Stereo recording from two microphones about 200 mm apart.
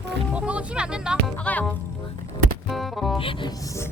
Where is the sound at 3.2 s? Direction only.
25° left (ahead or behind).